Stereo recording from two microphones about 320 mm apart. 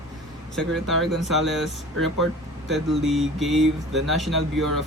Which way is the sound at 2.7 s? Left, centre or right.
Centre.